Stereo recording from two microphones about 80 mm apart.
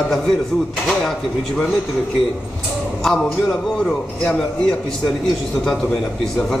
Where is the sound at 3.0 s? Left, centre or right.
Centre.